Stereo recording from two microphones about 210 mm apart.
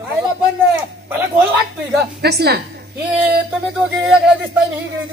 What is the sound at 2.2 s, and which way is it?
Speech, 50° right (ahead or behind).